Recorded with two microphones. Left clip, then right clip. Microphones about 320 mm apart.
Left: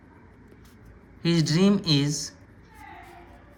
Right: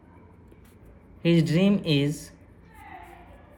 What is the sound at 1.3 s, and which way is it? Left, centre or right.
Speech, centre.